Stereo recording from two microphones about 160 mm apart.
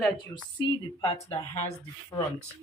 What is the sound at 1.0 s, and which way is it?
Speech, 35° left (ahead or behind).